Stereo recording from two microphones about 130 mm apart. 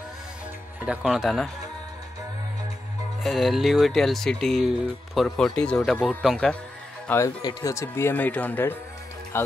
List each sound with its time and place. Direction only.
0.8 s speech: centre (ahead or behind)
3.3 s speech: centre (ahead or behind)
7.1 s speech: 20° left (ahead or behind)